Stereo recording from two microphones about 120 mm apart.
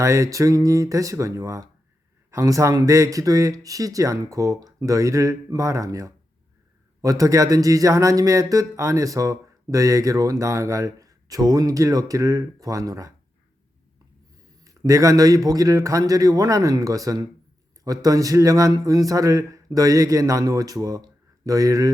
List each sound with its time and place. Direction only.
0.0 s speech: 25° right (ahead or behind)
14.6 s speech: 30° right (ahead or behind)